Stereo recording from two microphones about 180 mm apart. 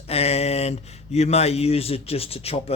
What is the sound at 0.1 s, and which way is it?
Speech, 35° left (ahead or behind).